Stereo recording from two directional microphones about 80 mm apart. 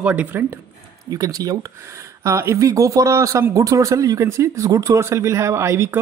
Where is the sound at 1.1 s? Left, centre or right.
Right.